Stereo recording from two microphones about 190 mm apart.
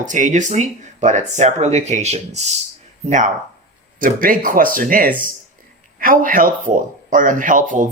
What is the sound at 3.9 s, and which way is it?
Speech, 45° right (ahead or behind).